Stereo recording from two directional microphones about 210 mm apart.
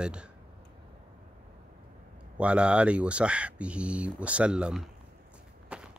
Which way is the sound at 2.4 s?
5° right (ahead or behind).